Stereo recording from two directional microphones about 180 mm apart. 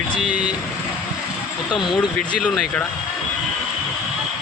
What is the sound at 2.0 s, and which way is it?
Speech, 5° left (ahead or behind).